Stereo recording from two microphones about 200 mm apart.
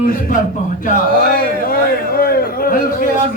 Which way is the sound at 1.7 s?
50° left (ahead or behind).